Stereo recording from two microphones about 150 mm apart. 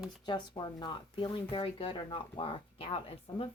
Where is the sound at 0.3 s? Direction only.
30° left (ahead or behind).